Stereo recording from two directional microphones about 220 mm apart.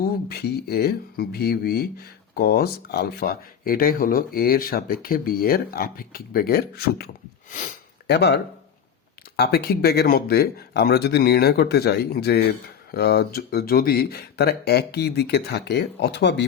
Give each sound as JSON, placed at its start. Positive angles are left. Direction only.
{"t": 0.0, "sound": "speech", "side_deg": 45}